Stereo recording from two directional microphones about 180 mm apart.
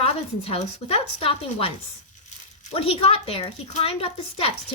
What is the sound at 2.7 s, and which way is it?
A woman's voice, 35° left (ahead or behind).